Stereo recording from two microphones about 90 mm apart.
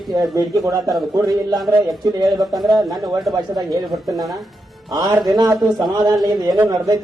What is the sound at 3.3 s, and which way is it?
Speech, 45° right (ahead or behind).